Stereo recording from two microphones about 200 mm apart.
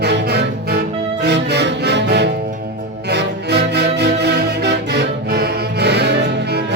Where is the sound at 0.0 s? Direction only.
55° right (ahead or behind).